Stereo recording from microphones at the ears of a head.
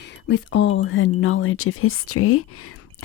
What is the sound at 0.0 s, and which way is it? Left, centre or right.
Speech, left.